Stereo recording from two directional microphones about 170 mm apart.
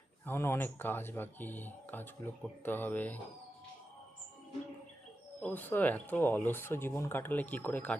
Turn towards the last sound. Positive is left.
turn(degrees=10)  # may be behind; listen again after turning